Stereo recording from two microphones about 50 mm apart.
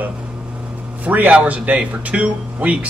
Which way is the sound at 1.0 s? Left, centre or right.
Right.